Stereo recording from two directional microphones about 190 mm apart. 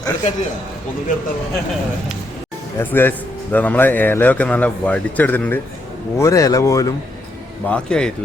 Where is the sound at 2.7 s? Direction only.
10° left (ahead or behind).